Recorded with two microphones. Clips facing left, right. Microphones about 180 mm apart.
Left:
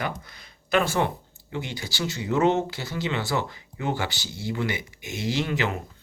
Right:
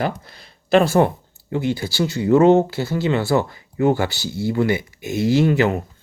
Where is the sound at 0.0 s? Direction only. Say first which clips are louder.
Right 7 dB; 35° right (ahead or behind).